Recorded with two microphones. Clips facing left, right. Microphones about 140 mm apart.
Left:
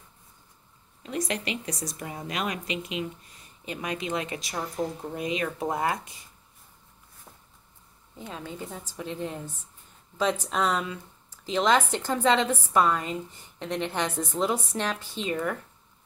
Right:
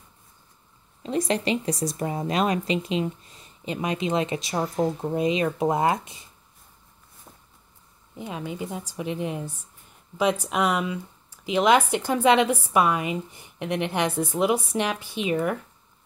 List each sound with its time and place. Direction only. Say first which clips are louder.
1.0 s speech: right 6 dB; 30° right (ahead or behind)
7.3 s walk: right 2 dB; 5° right (ahead or behind)
8.2 s speech: right 5 dB; 15° right (ahead or behind)